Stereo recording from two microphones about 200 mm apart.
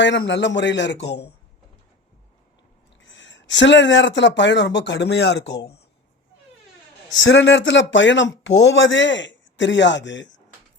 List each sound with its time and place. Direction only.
0.0 s speech: 65° left (ahead or behind)
3.1 s speech: 65° left (ahead or behind)
7.1 s speech: 60° left (ahead or behind)